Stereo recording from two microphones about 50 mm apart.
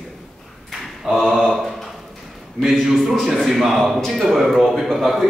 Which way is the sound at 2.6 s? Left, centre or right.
Centre.